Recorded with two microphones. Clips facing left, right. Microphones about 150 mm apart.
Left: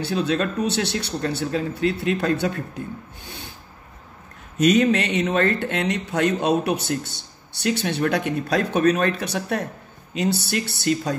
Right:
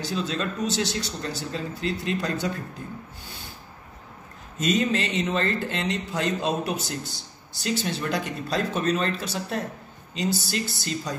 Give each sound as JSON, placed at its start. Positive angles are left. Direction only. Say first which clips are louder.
{"t": 0.1, "sound": "speech", "louder": "left 7 dB", "side_deg": 65}
{"t": 4.6, "sound": "speech", "louder": "left 6 dB", "side_deg": 70}